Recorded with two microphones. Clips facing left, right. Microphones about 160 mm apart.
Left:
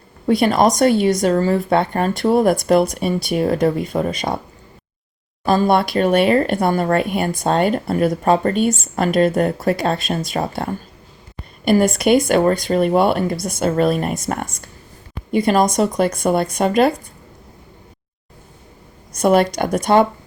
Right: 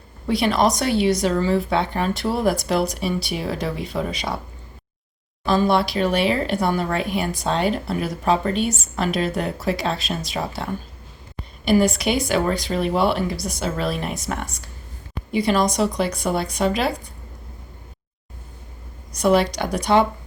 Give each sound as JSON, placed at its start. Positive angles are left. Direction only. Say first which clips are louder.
{"t": 0.3, "sound": "speech", "louder": "left 4 dB", "side_deg": 50}
{"t": 5.5, "sound": "speech", "louder": "left 3 dB", "side_deg": 50}
{"t": 19.1, "sound": "speech", "louder": "left 3 dB", "side_deg": 50}